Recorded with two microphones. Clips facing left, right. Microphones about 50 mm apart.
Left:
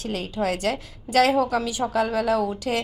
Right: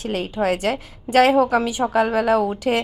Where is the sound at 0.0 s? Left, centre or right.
Right.